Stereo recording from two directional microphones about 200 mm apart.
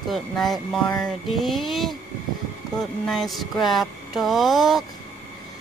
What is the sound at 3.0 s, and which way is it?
Speech, centre (ahead or behind).